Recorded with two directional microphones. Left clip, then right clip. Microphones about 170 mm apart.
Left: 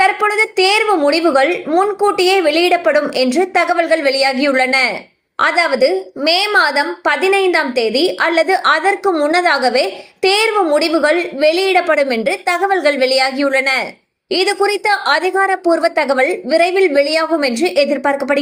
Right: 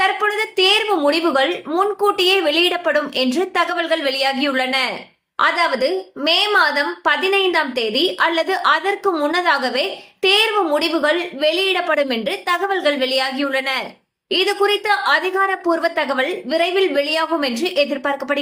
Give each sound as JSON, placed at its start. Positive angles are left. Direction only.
{"t": 0.0, "sound": "a woman's voice", "side_deg": 20}